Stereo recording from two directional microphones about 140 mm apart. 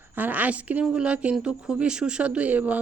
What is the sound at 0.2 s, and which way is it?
A woman's voice, 10° right (ahead or behind).